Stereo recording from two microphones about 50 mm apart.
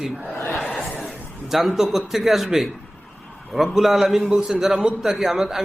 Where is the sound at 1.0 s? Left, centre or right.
Centre.